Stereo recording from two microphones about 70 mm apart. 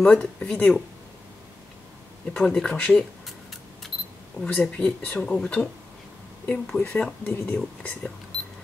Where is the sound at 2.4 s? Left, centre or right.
Centre.